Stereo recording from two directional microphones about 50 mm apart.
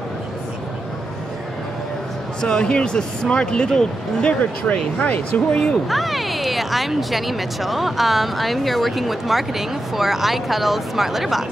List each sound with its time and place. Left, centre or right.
2.4 s speech: centre
4.4 s speech: left
5.9 s speech: centre